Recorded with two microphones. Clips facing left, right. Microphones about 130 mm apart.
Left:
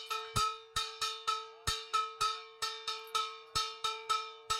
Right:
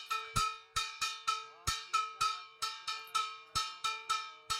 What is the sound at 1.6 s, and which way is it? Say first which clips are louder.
Cowbell: even; 60° left (ahead or behind).